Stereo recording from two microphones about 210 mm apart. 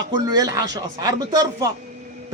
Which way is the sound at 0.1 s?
20° right (ahead or behind).